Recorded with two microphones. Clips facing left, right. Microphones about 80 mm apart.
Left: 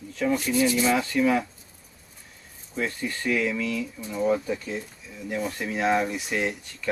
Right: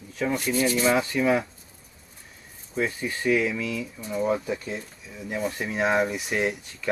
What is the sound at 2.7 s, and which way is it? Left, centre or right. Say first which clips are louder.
Speech: right 2 dB; centre.